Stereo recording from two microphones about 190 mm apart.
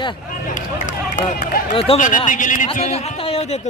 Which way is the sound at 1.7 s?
30° left (ahead or behind).